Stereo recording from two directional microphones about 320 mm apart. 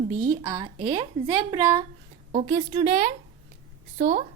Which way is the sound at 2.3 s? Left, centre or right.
Right.